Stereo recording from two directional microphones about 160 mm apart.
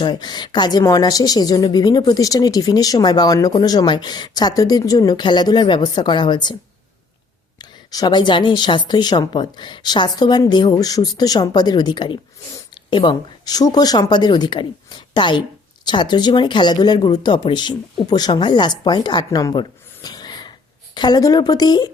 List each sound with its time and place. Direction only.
0.0 s speech: 25° left (ahead or behind)
7.6 s a woman's voice: 25° left (ahead or behind)